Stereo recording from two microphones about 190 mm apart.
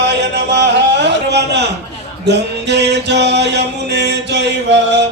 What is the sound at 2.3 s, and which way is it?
Music, 65° right (ahead or behind).